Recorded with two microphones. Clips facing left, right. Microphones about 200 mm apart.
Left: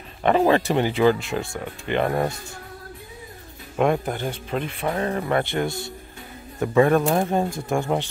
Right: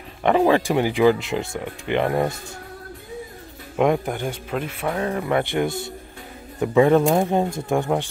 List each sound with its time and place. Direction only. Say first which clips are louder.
0.5 s speech: right 1 dB; 10° right (ahead or behind)
3.7 s speech: right 1 dB; 15° right (ahead or behind)